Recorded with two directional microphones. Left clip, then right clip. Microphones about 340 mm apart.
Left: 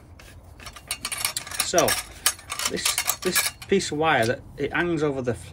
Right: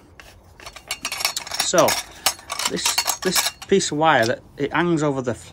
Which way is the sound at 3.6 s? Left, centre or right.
Centre.